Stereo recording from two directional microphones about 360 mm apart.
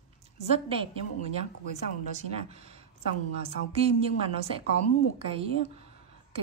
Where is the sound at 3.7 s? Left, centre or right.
Centre.